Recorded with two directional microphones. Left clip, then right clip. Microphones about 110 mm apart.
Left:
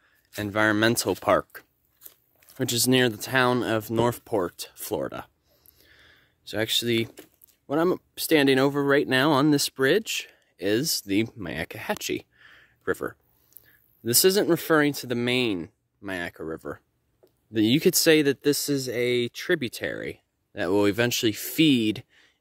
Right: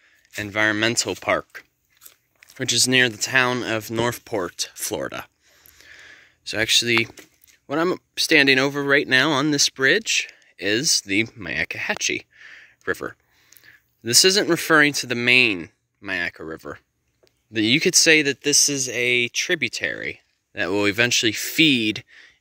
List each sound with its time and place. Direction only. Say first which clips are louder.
0.4 s speech: right 2 dB; 60° left (ahead or behind)
1.6 s speech: right 5 dB; 55° left (ahead or behind); by 5.3 s 25° left (ahead or behind)
5.8 s a sound: right 11 dB; 25° left (ahead or behind)
7.6 s speech: right 2 dB; 25° left (ahead or behind)
9.5 s speech: right 4 dB; 50° left (ahead or behind); by 19.8 s 90° left
19.8 s speech: right 5 dB; 50° left (ahead or behind)